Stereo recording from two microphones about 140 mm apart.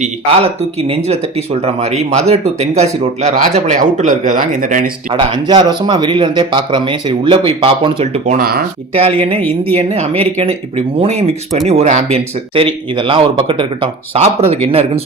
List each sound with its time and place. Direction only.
0.0 s speech: 45° right (ahead or behind); by 4.9 s 70° right (ahead or behind)
5.1 s speech: 35° right (ahead or behind); by 8.4 s 50° right (ahead or behind)
8.4 s speech: 90° right
8.9 s speech: 45° right (ahead or behind)